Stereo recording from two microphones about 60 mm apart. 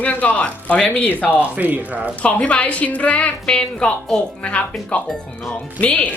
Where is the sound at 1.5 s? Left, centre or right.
Right.